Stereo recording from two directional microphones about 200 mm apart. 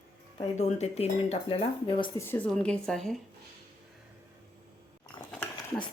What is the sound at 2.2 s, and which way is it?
Speech, 10° left (ahead or behind).